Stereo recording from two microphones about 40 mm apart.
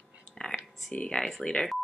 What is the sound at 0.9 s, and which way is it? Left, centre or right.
Speech, left.